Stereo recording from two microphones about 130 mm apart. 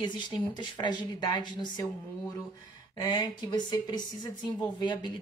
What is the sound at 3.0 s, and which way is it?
Speech, 30° left (ahead or behind).